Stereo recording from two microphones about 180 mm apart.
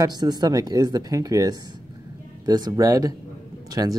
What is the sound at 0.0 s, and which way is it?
Speech, 25° right (ahead or behind).